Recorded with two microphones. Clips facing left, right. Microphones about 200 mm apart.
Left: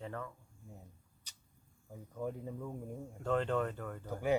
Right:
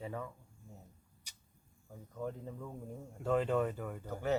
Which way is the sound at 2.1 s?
10° left (ahead or behind).